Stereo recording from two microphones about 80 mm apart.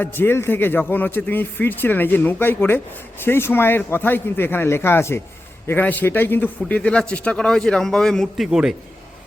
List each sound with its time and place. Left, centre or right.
0.0 s a man's voice: left; by 8.4 s centre
8.4 s a man's voice: centre